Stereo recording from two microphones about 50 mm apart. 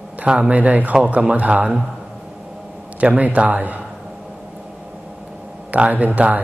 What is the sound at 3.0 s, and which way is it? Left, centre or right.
Speech, right.